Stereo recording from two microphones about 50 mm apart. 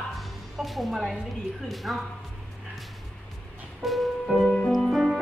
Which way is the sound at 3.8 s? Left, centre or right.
Centre.